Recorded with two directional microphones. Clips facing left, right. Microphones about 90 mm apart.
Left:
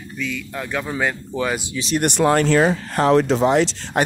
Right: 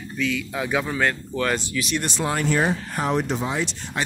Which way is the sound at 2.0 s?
65° left (ahead or behind).